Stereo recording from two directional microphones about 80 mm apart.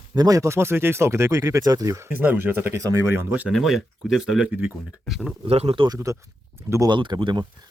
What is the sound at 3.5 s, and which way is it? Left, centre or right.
Speech, centre.